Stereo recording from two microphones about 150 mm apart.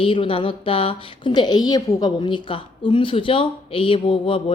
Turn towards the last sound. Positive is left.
turn(degrees=35)  # may be behind; listen again after turning